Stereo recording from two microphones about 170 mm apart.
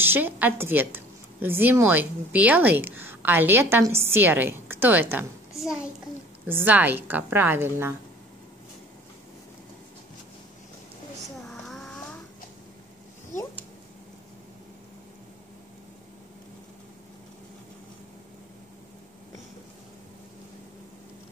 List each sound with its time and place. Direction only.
0.0 s a woman's voice: 10° right (ahead or behind)
6.4 s a woman's voice: 10° right (ahead or behind)
11.5 s a sound: 5° left (ahead or behind)